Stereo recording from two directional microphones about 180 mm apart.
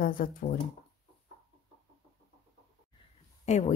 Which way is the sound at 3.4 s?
40° left (ahead or behind).